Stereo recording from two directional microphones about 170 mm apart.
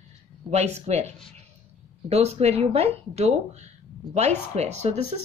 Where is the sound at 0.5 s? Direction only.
40° right (ahead or behind).